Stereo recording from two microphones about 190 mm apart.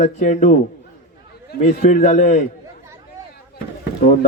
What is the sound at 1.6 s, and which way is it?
Speech, 40° left (ahead or behind).